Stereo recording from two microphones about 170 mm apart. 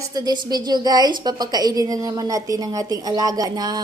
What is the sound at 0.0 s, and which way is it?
A woman's voice, 25° right (ahead or behind).